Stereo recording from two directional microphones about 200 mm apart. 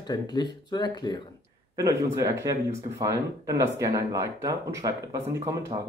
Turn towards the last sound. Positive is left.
turn(degrees=-15)  # may be behind; listen again after turning